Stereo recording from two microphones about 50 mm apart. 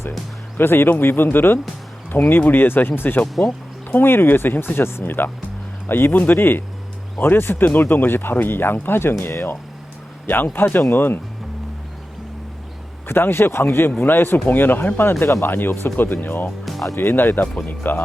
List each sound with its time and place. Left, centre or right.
0.5 s speech: left
10.2 s speech: left
13.1 s speech: left
16.6 s music: centre
17.0 s speech: left